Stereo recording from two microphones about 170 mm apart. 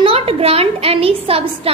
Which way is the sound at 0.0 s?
35° right (ahead or behind).